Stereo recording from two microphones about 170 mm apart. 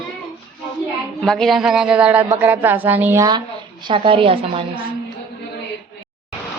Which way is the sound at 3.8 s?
30° right (ahead or behind).